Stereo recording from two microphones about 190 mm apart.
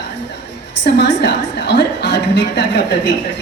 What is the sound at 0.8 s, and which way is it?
A woman's voice, 65° left (ahead or behind).